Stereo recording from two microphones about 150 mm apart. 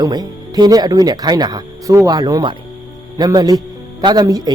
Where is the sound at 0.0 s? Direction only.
25° right (ahead or behind).